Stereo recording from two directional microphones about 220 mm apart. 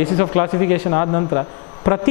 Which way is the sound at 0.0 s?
10° left (ahead or behind).